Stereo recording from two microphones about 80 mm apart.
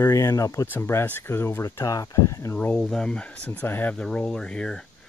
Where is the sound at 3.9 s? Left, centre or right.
Centre.